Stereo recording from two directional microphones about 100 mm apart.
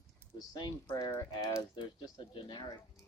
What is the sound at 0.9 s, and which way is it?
Speech, 30° left (ahead or behind).